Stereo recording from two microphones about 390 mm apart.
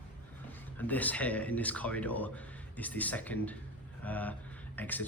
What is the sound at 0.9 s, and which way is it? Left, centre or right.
Speech, centre.